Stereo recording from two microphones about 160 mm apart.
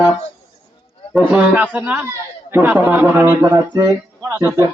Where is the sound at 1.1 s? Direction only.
10° right (ahead or behind).